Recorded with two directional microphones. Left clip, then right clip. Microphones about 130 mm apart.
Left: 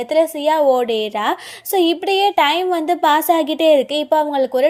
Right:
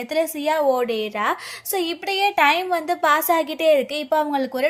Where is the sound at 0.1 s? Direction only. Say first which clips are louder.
Left 6 dB; 35° left (ahead or behind).